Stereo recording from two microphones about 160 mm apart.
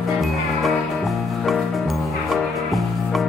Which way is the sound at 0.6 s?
Centre (ahead or behind).